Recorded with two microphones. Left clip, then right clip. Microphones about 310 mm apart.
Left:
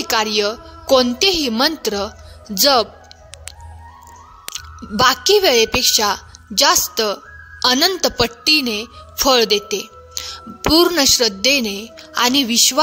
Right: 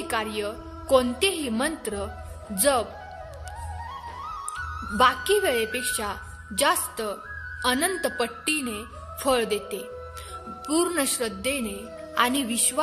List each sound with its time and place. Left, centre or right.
0.0 s a woman's voice: left
4.6 s a woman's voice: left